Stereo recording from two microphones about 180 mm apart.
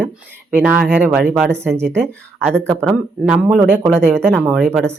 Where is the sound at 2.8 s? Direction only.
5° right (ahead or behind).